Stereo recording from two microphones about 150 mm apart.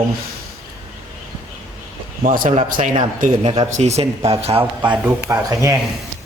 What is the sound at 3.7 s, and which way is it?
Speech, 45° right (ahead or behind).